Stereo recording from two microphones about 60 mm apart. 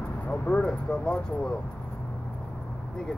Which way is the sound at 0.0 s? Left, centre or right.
Left.